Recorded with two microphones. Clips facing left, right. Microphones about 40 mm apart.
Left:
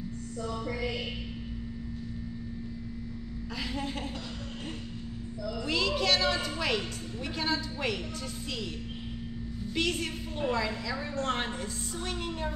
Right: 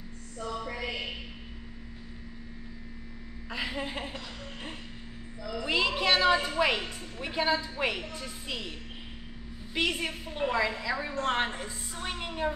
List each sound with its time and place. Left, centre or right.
0.4 s music: centre
3.5 s a woman's voice: right
5.4 s a woman's voice: right
9.8 s a woman's voice: centre